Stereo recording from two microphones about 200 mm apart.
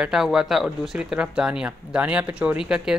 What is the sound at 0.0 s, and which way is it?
Speech, centre (ahead or behind).